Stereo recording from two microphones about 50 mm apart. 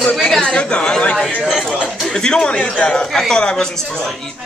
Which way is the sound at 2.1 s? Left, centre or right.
Centre.